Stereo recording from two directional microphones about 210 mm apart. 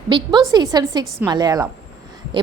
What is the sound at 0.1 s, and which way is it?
A woman's voice, 25° right (ahead or behind).